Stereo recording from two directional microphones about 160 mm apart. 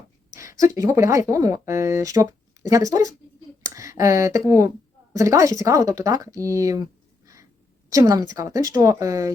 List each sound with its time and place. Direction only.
0.3 s speech: 20° right (ahead or behind)
7.9 s speech: 20° right (ahead or behind)